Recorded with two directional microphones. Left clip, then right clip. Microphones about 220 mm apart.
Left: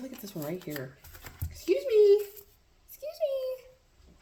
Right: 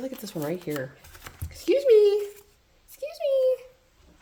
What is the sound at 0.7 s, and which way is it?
Speech, 50° right (ahead or behind).